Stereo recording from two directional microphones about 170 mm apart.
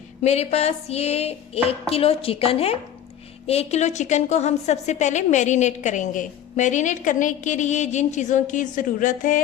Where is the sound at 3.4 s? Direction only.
35° left (ahead or behind).